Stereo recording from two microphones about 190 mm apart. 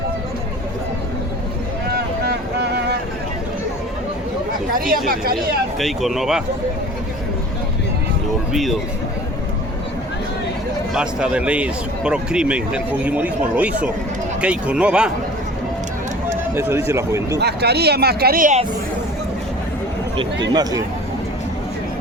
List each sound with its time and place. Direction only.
1.9 s boat: 60° right (ahead or behind)
4.7 s speech: 50° right (ahead or behind)
5.8 s speech: centre (ahead or behind)
10.9 s a man's voice: 5° right (ahead or behind)
16.6 s a man's voice: 10° right (ahead or behind)
17.3 s speech: 60° right (ahead or behind)
20.5 s speech: 20° right (ahead or behind)